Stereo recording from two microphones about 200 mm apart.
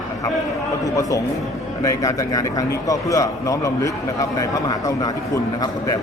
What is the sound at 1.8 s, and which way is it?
Speech, 15° left (ahead or behind).